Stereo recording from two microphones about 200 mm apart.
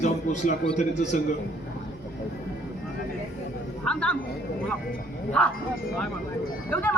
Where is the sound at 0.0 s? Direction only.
35° left (ahead or behind).